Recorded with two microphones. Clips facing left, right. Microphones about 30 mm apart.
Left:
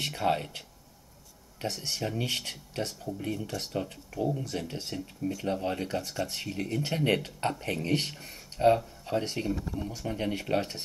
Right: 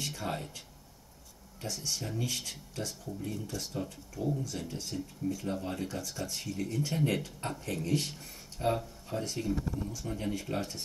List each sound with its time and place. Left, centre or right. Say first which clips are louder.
0.0 s speech: left 8 dB; left